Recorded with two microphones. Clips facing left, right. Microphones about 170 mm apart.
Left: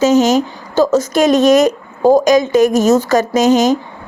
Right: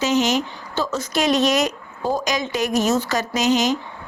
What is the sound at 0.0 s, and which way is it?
Speech, 45° left (ahead or behind).